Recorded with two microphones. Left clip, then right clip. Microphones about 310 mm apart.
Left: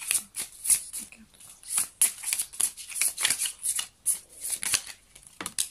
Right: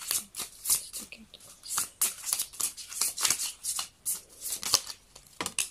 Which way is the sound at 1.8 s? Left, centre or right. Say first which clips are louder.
Left 2 dB; centre.